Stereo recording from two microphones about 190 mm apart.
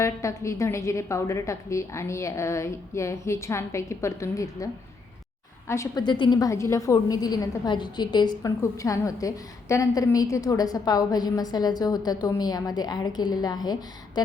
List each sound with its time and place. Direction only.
0.0 s a woman's voice: 15° left (ahead or behind)